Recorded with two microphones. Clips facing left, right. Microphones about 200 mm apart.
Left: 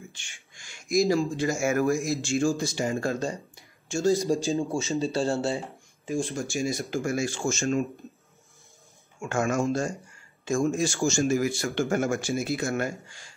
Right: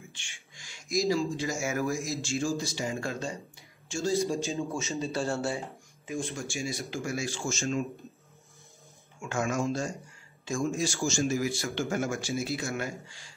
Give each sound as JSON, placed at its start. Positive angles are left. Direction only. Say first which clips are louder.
{"t": 0.1, "sound": "speech", "louder": "even", "side_deg": 45}
{"t": 4.3, "sound": "speech", "louder": "left 6 dB", "side_deg": 35}
{"t": 6.3, "sound": "speech", "louder": "left 6 dB", "side_deg": 45}
{"t": 9.2, "sound": "speech", "louder": "left 4 dB", "side_deg": 50}